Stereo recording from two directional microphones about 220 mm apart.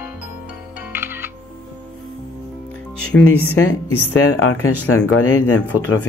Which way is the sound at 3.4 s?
75° left (ahead or behind).